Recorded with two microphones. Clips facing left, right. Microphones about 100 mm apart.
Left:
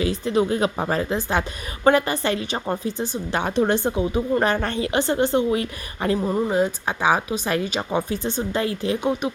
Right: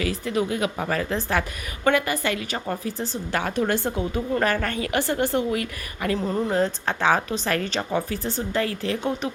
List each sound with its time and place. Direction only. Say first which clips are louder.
0.0 s a woman's voice: left 4 dB; 25° left (ahead or behind)
6.1 s a woman's voice: left 1 dB; 15° left (ahead or behind)